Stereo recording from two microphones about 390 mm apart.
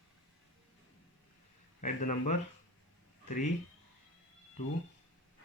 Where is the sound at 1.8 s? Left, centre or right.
Centre.